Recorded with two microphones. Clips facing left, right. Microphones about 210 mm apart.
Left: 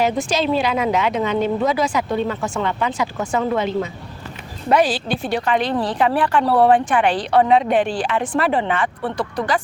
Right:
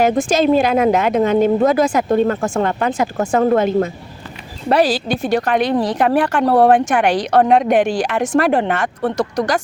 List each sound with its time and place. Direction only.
0.0 s speech: 50° right (ahead or behind)
4.7 s speech: 40° right (ahead or behind)
5.5 s a woman's voice: 15° right (ahead or behind)
6.0 s speech: 45° right (ahead or behind)
7.6 s a woman's voice: 15° right (ahead or behind)
8.3 s speech: 45° right (ahead or behind)